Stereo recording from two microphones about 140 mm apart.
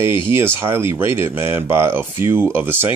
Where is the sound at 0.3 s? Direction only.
20° right (ahead or behind).